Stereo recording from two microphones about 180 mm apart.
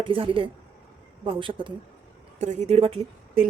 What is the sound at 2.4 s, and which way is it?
Speech, 40° right (ahead or behind).